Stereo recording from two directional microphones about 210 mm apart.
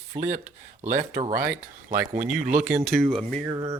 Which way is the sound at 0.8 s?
35° right (ahead or behind).